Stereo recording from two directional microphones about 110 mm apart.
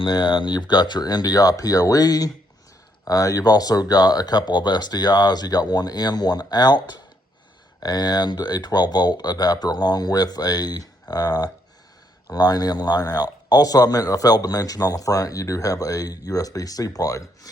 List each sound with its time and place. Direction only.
0.0 s a man's voice: 45° left (ahead or behind)